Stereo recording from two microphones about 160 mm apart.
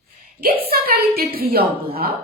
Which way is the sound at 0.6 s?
70° right (ahead or behind).